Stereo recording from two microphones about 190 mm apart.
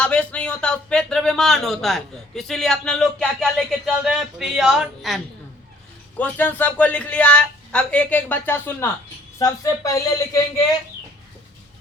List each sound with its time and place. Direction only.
0.0 s a man's voice: 5° left (ahead or behind)